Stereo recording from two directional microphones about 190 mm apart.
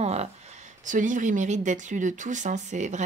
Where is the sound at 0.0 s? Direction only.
35° right (ahead or behind).